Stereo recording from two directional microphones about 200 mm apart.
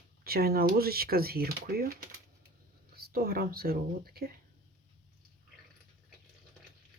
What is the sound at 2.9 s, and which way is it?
Speech, 50° right (ahead or behind).